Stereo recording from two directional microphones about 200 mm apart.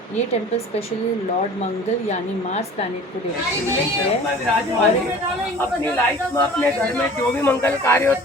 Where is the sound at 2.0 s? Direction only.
35° left (ahead or behind).